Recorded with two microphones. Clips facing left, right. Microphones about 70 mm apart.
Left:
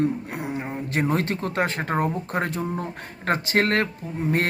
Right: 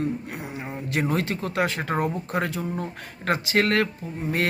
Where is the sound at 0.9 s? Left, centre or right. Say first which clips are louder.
Left 1 dB; left.